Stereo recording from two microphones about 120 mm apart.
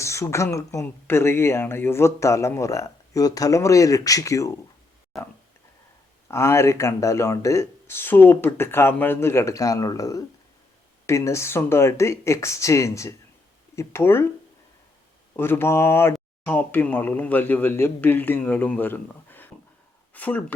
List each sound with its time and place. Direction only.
0.0 s speech: 25° left (ahead or behind)
6.2 s speech: 20° left (ahead or behind)
15.4 s speech: 20° left (ahead or behind)